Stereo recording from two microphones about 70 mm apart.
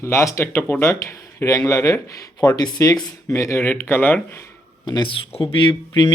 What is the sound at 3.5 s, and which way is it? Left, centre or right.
Speech, left.